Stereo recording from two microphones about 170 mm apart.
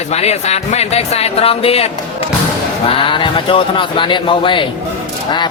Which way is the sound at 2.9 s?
30° left (ahead or behind).